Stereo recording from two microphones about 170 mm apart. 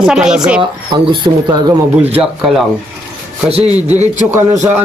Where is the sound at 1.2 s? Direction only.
25° right (ahead or behind).